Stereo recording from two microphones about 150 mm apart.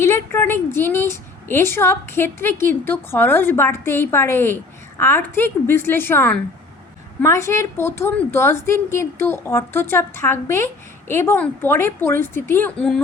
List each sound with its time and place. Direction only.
0.0 s a woman's voice: 20° left (ahead or behind)